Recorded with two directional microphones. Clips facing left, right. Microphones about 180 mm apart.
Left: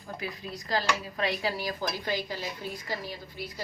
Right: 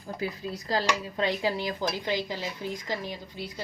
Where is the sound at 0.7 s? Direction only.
30° right (ahead or behind).